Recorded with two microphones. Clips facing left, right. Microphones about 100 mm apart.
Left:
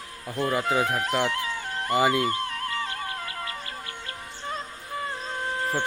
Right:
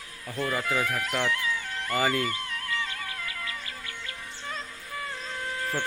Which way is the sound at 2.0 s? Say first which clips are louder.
Left 4 dB; 15° left (ahead or behind).